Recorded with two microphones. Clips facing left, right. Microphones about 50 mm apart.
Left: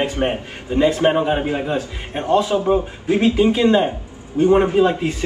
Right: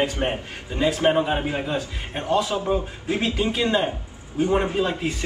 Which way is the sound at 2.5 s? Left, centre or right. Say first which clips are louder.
Left 6 dB; centre.